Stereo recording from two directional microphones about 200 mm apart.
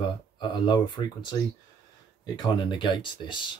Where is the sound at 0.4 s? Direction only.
25° left (ahead or behind).